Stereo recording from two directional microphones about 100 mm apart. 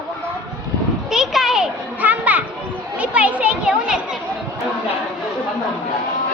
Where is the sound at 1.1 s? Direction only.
Centre (ahead or behind).